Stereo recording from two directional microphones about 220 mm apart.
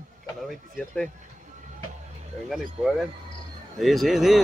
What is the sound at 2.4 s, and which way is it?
Speech, centre (ahead or behind).